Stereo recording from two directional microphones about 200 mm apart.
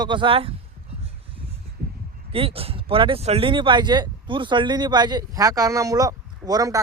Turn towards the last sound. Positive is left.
turn(degrees=-15)  # may be behind; listen again after turning